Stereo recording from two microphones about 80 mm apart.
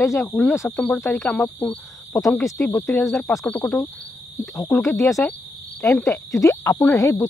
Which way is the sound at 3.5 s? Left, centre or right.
Centre.